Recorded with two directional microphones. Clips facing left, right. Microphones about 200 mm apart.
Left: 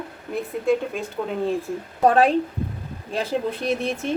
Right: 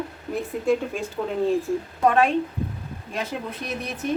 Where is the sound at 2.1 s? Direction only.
35° left (ahead or behind).